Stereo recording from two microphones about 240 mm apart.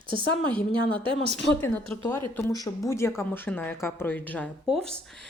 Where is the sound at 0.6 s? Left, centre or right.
Centre.